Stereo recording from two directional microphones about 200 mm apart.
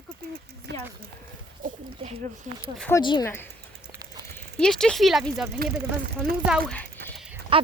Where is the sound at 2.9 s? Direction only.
20° left (ahead or behind); by 5.4 s centre (ahead or behind).